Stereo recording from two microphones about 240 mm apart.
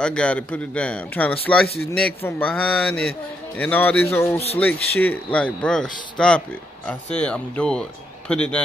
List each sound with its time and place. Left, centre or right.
0.0 s a man's voice: centre